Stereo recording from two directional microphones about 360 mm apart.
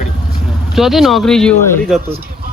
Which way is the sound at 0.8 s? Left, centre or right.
Centre.